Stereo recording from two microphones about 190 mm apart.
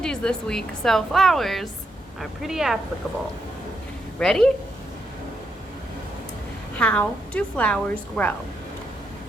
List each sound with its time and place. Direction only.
0.0 s a woman's voice: 5° left (ahead or behind)
4.2 s a woman's voice: 5° left (ahead or behind)
6.7 s a woman's voice: 5° left (ahead or behind)